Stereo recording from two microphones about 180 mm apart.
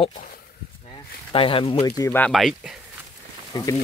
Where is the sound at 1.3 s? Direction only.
30° left (ahead or behind); by 2.7 s centre (ahead or behind).